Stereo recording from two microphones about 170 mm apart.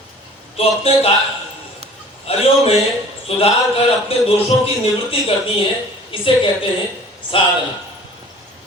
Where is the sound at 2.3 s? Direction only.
35° left (ahead or behind).